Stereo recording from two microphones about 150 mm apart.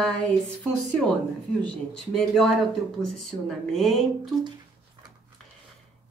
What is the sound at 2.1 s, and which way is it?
Speech, centre (ahead or behind).